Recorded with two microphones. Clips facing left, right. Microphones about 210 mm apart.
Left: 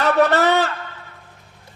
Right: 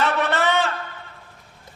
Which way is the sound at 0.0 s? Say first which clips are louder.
Left 5 dB; 40° left (ahead or behind).